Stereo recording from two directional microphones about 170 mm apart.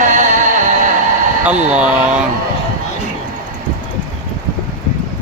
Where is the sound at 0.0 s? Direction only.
45° right (ahead or behind).